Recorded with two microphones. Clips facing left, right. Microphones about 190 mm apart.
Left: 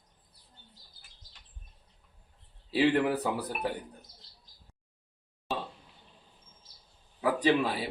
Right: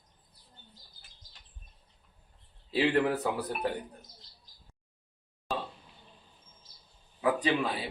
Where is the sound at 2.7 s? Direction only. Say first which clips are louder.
Left 1 dB; 5° left (ahead or behind).